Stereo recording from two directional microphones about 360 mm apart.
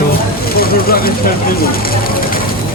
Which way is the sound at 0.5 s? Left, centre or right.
Left.